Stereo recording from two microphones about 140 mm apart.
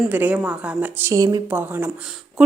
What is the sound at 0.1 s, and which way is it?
A woman's voice, 10° right (ahead or behind).